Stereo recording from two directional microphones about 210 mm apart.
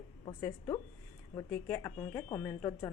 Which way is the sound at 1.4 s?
15° left (ahead or behind).